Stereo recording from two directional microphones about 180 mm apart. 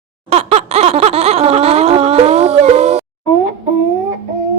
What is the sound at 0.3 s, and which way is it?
Laughter, 35° right (ahead or behind).